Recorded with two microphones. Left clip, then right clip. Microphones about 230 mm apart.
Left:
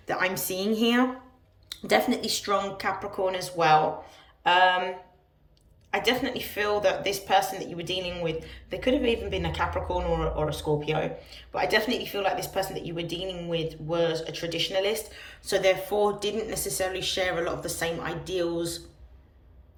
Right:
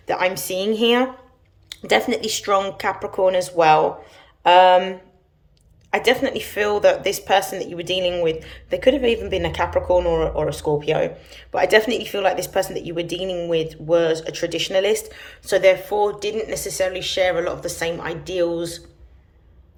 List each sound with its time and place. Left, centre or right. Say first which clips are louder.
0.0 s a woman's voice: right 6 dB; centre